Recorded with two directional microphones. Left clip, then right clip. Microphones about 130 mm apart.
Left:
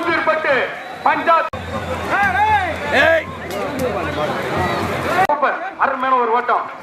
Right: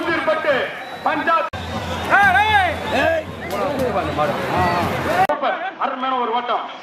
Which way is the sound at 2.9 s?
35° left (ahead or behind).